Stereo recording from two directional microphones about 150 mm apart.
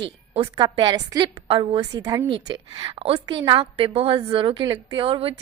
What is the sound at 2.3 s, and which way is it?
A woman's voice, 35° right (ahead or behind).